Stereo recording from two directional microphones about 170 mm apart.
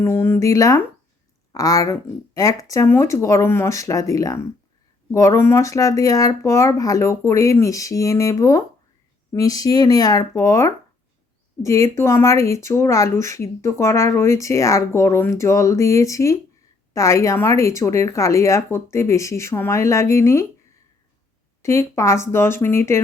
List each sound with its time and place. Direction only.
0.0 s speech: 15° left (ahead or behind)
21.6 s speech: 15° left (ahead or behind)